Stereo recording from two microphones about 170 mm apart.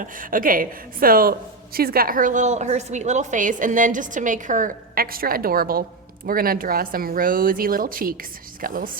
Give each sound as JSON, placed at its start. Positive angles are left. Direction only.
{"t": 0.0, "sound": "a woman's voice", "side_deg": -55}